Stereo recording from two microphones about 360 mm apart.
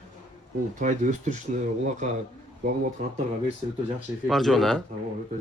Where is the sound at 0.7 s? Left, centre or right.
Centre.